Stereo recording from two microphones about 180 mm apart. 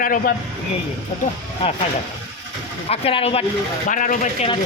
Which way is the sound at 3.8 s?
45° left (ahead or behind).